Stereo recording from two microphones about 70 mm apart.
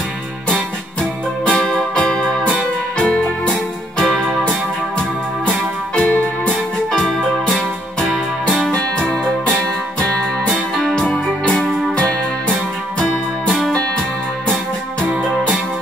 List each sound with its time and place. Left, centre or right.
1.4 s music: centre
5.5 s music: centre
6.9 s music: centre